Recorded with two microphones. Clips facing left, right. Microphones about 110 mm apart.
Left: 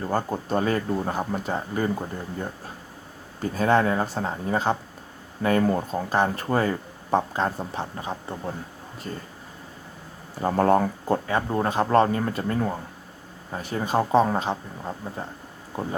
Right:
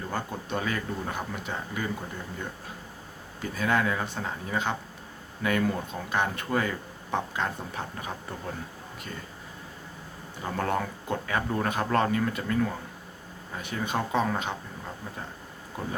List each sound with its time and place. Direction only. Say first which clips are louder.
0.0 s speech: left 7 dB; 40° left (ahead or behind)
3.4 s speech: left 6 dB; 40° left (ahead or behind)
10.4 s speech: left 9 dB; 35° left (ahead or behind)